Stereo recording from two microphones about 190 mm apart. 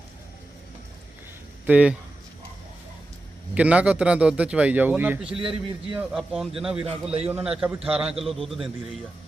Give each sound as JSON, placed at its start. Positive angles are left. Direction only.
{"t": 1.6, "sound": "a man's voice", "side_deg": -5}
{"t": 3.5, "sound": "a man's voice", "side_deg": -5}
{"t": 5.4, "sound": "a man's voice", "side_deg": -25}
{"t": 6.0, "sound": "a man's voice", "side_deg": -5}
{"t": 6.8, "sound": "a man's voice", "side_deg": -35}
{"t": 7.3, "sound": "a man's voice", "side_deg": -10}